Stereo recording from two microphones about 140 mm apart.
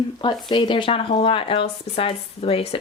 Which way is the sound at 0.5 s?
35° left (ahead or behind).